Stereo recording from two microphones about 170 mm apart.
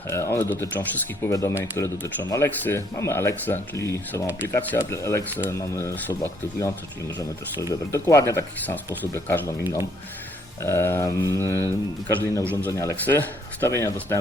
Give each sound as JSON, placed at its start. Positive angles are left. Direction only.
{"t": 0.1, "sound": "speech", "side_deg": 15}
{"t": 10.6, "sound": "speech", "side_deg": 15}